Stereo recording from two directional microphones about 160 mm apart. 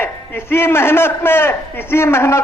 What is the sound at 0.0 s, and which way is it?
A man's voice, 15° left (ahead or behind).